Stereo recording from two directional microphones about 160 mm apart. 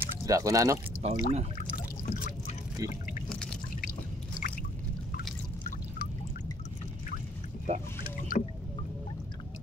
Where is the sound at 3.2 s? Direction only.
5° left (ahead or behind).